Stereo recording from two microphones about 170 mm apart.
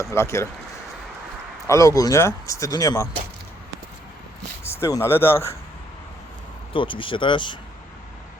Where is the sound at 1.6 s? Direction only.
20° left (ahead or behind).